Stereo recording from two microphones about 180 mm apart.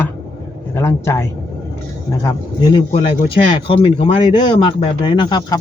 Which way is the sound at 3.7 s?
30° left (ahead or behind).